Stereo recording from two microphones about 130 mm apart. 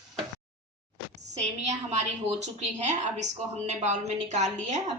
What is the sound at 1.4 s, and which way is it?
A woman's voice, 65° right (ahead or behind).